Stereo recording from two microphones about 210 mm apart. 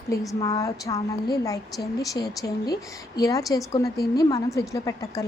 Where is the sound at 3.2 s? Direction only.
15° left (ahead or behind).